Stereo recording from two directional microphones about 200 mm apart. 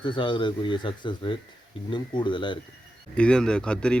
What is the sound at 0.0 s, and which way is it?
Speech, 25° left (ahead or behind).